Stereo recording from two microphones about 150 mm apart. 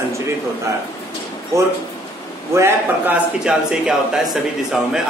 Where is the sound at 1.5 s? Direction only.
20° right (ahead or behind).